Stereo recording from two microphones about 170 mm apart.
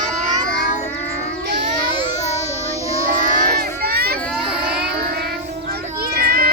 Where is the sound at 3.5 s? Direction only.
65° right (ahead or behind).